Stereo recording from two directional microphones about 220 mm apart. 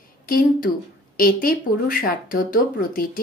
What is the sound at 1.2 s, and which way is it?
Speech, 40° left (ahead or behind).